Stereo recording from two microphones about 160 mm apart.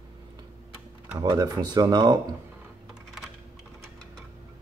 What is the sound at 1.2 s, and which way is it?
Speech, 25° right (ahead or behind).